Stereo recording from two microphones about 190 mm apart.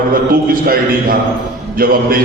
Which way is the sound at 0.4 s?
50° right (ahead or behind).